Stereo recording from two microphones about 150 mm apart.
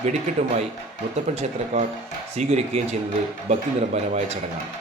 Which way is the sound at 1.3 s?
50° right (ahead or behind).